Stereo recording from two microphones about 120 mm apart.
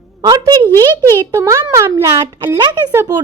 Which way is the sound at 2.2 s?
40° right (ahead or behind).